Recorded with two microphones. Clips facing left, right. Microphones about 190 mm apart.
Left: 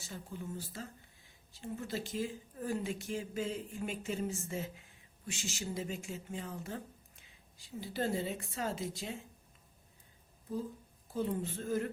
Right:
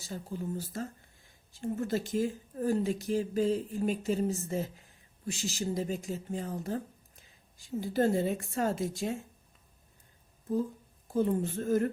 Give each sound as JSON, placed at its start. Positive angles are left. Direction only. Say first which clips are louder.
{"t": 0.0, "sound": "speech", "louder": "right 7 dB", "side_deg": -35}
{"t": 11.1, "sound": "speech", "louder": "right 7 dB", "side_deg": -45}